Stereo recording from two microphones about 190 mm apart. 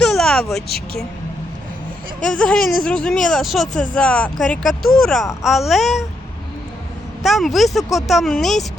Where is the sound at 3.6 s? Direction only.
40° left (ahead or behind).